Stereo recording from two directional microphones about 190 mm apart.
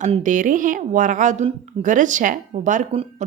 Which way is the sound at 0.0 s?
40° right (ahead or behind).